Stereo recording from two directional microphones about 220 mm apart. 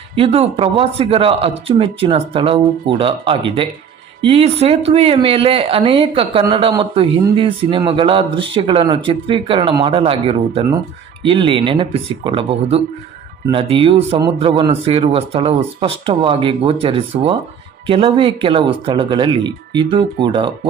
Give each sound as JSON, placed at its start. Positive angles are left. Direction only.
{"t": 0.2, "sound": "a man's voice", "side_deg": -25}